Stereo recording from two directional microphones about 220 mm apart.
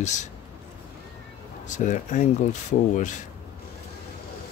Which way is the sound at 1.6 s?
35° left (ahead or behind).